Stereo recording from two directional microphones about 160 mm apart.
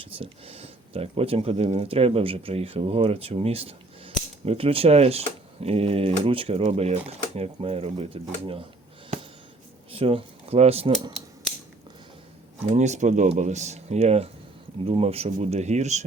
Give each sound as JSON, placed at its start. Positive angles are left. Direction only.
{"t": 0.0, "sound": "speech", "side_deg": -35}
{"t": 9.9, "sound": "speech", "side_deg": -35}
{"t": 12.7, "sound": "speech", "side_deg": -45}